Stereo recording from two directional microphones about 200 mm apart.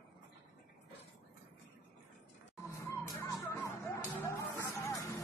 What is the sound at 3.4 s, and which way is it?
Music, 10° left (ahead or behind).